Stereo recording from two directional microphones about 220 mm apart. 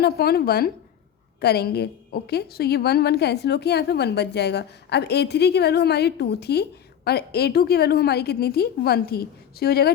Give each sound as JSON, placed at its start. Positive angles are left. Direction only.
{"t": 0.0, "sound": "a woman's voice", "side_deg": 45}